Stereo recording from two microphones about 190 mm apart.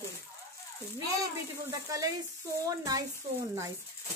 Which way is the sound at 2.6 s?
20° right (ahead or behind).